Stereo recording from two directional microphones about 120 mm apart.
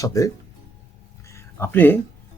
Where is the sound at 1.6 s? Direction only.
15° left (ahead or behind).